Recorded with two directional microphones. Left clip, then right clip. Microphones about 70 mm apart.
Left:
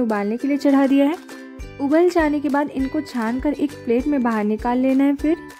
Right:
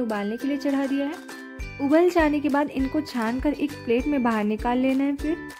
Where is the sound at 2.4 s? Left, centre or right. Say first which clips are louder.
Left 3 dB; centre.